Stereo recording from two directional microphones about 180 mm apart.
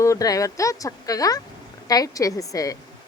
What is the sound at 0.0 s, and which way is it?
A woman's voice, 20° left (ahead or behind).